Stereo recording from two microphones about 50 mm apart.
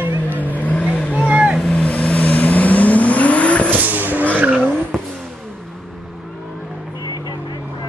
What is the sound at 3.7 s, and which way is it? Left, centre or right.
Vehicle, right.